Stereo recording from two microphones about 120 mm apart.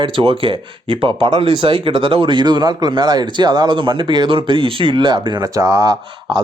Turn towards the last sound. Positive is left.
turn(degrees=-35)  # may be behind; listen again after turning